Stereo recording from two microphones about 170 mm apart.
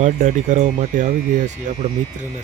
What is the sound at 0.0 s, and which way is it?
Speech, 45° right (ahead or behind).